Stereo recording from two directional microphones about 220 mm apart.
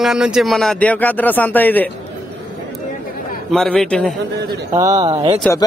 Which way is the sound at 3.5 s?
Centre (ahead or behind).